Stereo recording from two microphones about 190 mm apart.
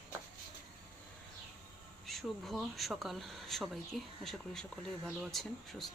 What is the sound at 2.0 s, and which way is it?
Speech, centre (ahead or behind).